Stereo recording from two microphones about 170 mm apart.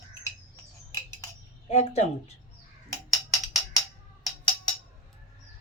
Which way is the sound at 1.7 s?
40° left (ahead or behind).